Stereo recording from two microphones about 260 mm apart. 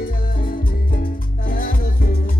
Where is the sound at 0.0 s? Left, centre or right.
Left.